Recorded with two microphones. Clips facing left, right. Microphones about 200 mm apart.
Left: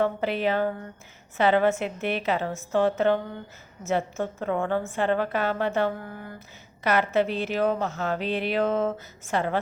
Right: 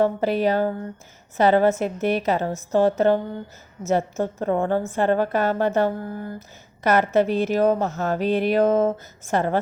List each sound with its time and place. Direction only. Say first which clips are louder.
0.0 s a woman's voice: right 5 dB; 40° right (ahead or behind)